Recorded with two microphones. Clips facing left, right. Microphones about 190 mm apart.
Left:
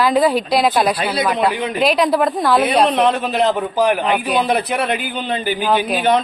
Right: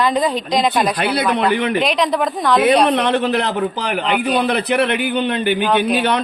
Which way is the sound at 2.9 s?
65° right (ahead or behind).